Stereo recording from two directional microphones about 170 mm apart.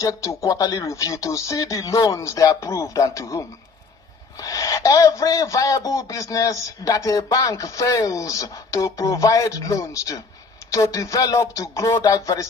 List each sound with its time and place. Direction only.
0.0 s a man's voice: 20° left (ahead or behind)